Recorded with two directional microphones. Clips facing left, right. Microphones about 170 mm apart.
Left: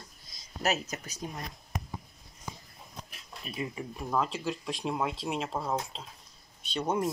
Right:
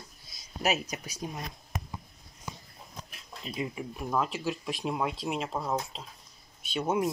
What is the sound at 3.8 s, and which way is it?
Speech, 5° right (ahead or behind).